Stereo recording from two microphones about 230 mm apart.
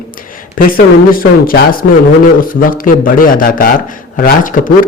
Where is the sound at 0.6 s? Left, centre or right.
Left.